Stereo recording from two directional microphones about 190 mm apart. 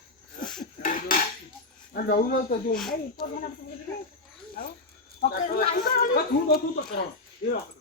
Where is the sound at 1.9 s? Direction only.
50° left (ahead or behind).